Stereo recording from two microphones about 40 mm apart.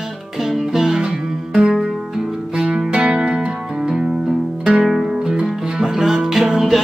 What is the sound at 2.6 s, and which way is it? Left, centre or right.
Music, right.